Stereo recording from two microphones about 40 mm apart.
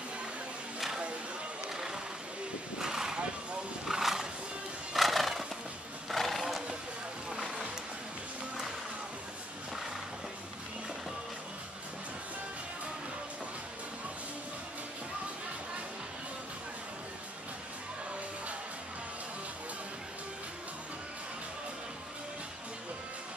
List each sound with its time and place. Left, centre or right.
0.7 s a sound: centre
1.7 s music: centre
2.8 s vehicle: centre
3.8 s wild animals: centre
4.9 s horse: centre
7.2 s boat: centre